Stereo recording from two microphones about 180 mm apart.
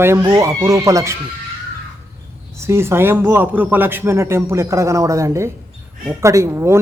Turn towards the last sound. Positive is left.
turn(degrees=-15)  # may be behind; listen again after turning